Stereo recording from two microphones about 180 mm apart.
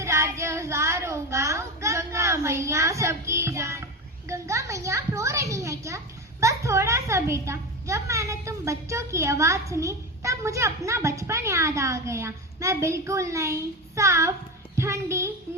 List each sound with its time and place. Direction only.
0.0 s child singing: 15° right (ahead or behind)
4.3 s a sound: 15° right (ahead or behind)
6.4 s a child's voice: 15° right (ahead or behind)